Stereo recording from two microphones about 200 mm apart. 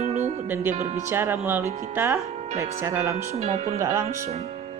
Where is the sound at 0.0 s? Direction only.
35° right (ahead or behind).